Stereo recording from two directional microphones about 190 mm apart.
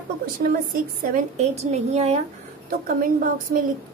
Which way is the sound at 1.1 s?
35° right (ahead or behind).